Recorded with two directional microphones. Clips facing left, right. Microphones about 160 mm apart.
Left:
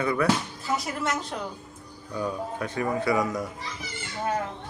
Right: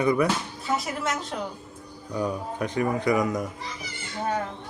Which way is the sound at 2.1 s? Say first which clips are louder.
Right 2 dB; 15° right (ahead or behind).